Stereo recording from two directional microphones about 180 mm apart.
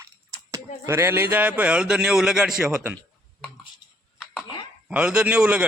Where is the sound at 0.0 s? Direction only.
15° right (ahead or behind).